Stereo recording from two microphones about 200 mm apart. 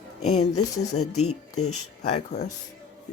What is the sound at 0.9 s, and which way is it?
Speech, 90° left.